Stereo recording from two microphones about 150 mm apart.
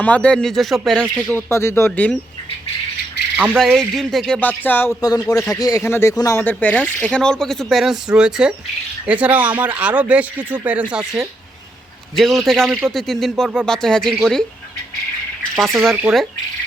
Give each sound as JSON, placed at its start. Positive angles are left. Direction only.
{"t": 0.0, "sound": "speech", "side_deg": 10}
{"t": 1.3, "sound": "speech", "side_deg": 15}
{"t": 3.3, "sound": "speech", "side_deg": -10}
{"t": 3.6, "sound": "speech", "side_deg": 5}
{"t": 4.4, "sound": "speech", "side_deg": 10}
{"t": 4.9, "sound": "speech", "side_deg": 25}
{"t": 15.5, "sound": "speech", "side_deg": 0}